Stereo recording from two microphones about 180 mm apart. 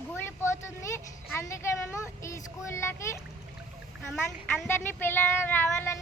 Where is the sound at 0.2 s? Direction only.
15° left (ahead or behind).